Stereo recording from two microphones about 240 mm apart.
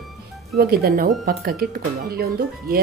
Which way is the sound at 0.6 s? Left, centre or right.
Right.